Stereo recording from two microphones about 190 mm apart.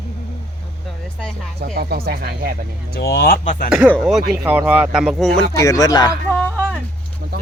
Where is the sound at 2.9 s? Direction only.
55° left (ahead or behind).